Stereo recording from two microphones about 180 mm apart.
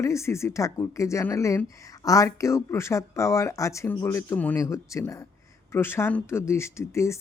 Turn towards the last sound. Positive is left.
turn(degrees=15)  # may be behind; listen again after turning